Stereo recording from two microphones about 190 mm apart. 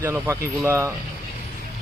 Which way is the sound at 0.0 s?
15° right (ahead or behind).